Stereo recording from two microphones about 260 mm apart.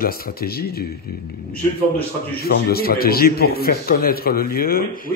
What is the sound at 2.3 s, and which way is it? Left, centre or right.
Speech, left.